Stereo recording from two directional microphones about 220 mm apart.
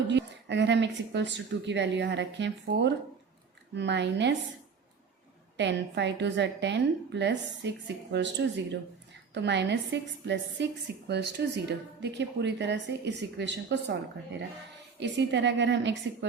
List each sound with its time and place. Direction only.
0.1 s a woman's voice: 55° right (ahead or behind)
5.5 s a woman's voice: 50° right (ahead or behind)
14.9 s a woman's voice: 50° right (ahead or behind)